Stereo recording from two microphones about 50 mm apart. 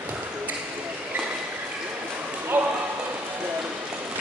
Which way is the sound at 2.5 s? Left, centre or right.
Right.